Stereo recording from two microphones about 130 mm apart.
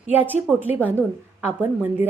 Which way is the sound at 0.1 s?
15° right (ahead or behind).